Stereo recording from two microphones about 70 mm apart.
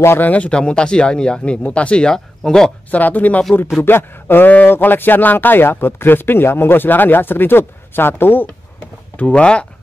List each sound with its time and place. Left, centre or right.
0.0 s speech: left
0.3 s speech: centre
2.9 s speech: left
9.2 s speech: centre